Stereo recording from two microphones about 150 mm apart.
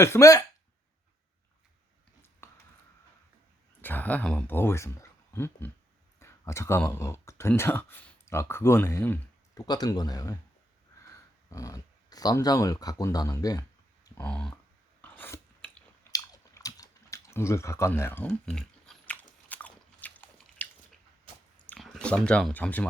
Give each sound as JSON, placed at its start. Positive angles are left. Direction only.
{"t": 0.0, "sound": "speech", "side_deg": 20}
{"t": 2.4, "sound": "a sound", "side_deg": 20}
{"t": 3.8, "sound": "speech", "side_deg": 10}
{"t": 9.6, "sound": "speech", "side_deg": 25}
{"t": 11.4, "sound": "speech", "side_deg": 20}
{"t": 14.2, "sound": "speech", "side_deg": 5}
{"t": 15.0, "sound": "chewing", "side_deg": 10}
{"t": 16.1, "sound": "chewing", "side_deg": 25}
{"t": 18.4, "sound": "biting", "side_deg": 5}
{"t": 21.8, "sound": "speech", "side_deg": 0}